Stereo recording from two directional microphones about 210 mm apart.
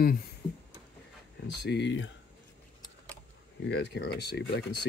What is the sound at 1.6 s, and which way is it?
Speech, 55° left (ahead or behind).